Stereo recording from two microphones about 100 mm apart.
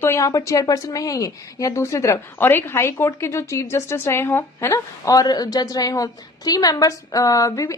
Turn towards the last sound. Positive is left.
turn(degrees=35)  # may be behind; listen again after turning